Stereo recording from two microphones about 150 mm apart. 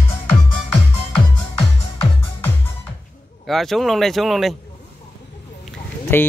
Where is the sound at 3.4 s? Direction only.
Centre (ahead or behind).